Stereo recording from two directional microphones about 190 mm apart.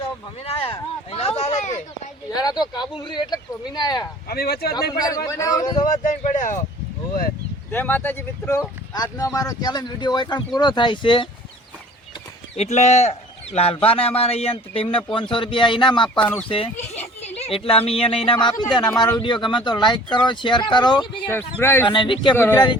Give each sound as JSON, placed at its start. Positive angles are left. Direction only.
{"t": 0.0, "sound": "speech", "side_deg": 30}
{"t": 2.3, "sound": "speech", "side_deg": 20}
{"t": 4.3, "sound": "speech", "side_deg": 55}
{"t": 4.7, "sound": "speech", "side_deg": 20}
{"t": 5.9, "sound": "speech", "side_deg": 40}
{"t": 7.7, "sound": "speech", "side_deg": 10}
{"t": 12.5, "sound": "speech", "side_deg": 35}
{"t": 16.2, "sound": "speech", "side_deg": 10}
{"t": 16.5, "sound": "speech", "side_deg": 30}
{"t": 21.6, "sound": "speech", "side_deg": 10}
{"t": 21.8, "sound": "speech", "side_deg": 25}
{"t": 22.4, "sound": "speech", "side_deg": 10}